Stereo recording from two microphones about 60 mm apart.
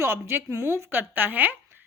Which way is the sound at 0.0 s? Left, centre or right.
Right.